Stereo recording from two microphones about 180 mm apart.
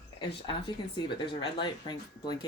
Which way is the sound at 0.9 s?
25° left (ahead or behind).